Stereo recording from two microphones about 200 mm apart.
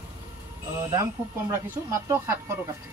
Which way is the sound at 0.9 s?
15° right (ahead or behind).